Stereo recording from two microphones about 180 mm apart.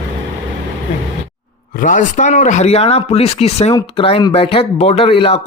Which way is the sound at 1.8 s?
45° left (ahead or behind).